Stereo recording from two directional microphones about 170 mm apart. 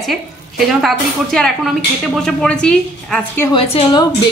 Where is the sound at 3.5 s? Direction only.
30° left (ahead or behind).